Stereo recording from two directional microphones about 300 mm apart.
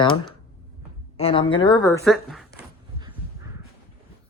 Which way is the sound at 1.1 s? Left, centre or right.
Centre.